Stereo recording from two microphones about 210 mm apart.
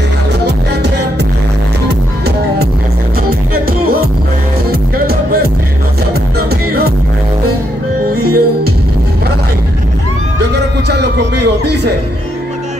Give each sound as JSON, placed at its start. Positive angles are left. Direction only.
{"t": 4.6, "sound": "music", "side_deg": -45}
{"t": 8.1, "sound": "music", "side_deg": -45}
{"t": 10.9, "sound": "music", "side_deg": -55}